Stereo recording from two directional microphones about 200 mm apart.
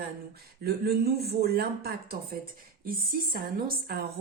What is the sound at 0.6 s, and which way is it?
A woman's voice, 50° right (ahead or behind).